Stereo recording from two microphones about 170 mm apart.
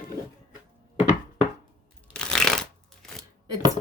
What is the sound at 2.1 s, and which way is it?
Shuffling cards, 5° left (ahead or behind).